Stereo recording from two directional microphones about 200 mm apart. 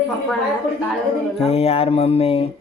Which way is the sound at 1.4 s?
30° left (ahead or behind).